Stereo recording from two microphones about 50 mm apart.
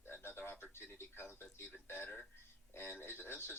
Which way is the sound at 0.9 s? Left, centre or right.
Left.